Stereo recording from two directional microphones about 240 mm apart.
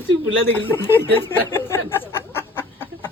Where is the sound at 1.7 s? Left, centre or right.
Centre.